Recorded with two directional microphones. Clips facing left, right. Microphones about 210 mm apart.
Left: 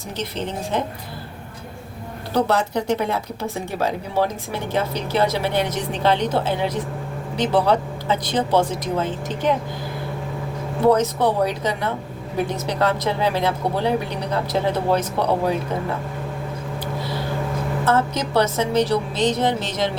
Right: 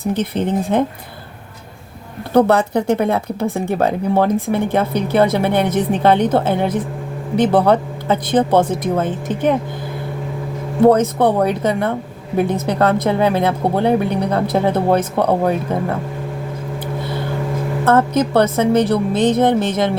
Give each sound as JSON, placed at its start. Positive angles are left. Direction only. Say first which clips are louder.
{"t": 0.0, "sound": "speech", "louder": "right 9 dB", "side_deg": -55}
{"t": 2.3, "sound": "speech", "louder": "right 7 dB", "side_deg": -55}
{"t": 10.8, "sound": "speech", "louder": "right 5 dB", "side_deg": -55}
{"t": 17.8, "sound": "speech", "louder": "right 7 dB", "side_deg": -55}